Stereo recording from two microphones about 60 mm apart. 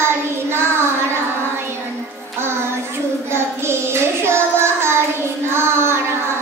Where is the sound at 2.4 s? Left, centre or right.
Right.